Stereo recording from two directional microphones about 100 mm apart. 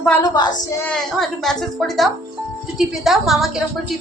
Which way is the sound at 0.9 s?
5° left (ahead or behind).